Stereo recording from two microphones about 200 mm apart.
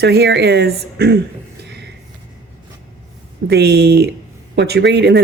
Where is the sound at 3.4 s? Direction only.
55° right (ahead or behind).